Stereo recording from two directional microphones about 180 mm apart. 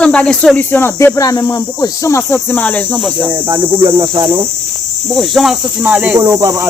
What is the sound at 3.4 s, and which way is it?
Speech, 25° right (ahead or behind).